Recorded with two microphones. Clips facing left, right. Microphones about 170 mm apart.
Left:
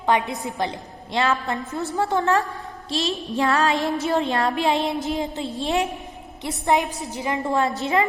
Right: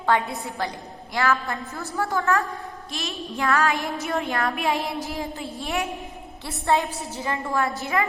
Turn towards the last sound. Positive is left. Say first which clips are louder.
# left 3 dB
turn(degrees=20)  # may be behind; listen again after turning